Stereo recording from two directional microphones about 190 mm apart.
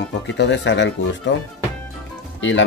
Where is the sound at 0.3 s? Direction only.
70° left (ahead or behind).